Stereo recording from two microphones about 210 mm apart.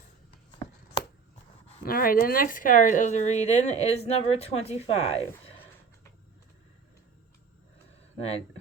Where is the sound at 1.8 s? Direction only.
45° left (ahead or behind).